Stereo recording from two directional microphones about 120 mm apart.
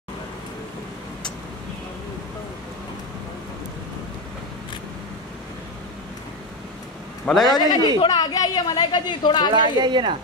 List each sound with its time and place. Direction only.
7.4 s speech: 35° left (ahead or behind)
9.5 s a woman's voice: 40° right (ahead or behind)